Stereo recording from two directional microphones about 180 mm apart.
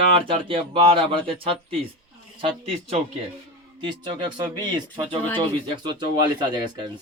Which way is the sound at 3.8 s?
25° right (ahead or behind).